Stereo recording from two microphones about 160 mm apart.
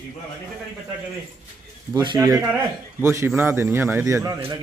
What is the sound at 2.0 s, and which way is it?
A man's voice, 25° right (ahead or behind).